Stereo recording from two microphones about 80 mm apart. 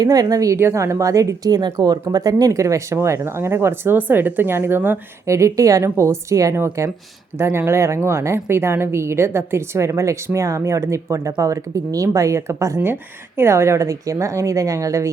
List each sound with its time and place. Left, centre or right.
0.0 s a woman's voice: right
5.2 s a woman's voice: right